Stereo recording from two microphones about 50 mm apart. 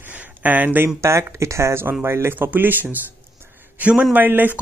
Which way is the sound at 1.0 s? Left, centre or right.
Right.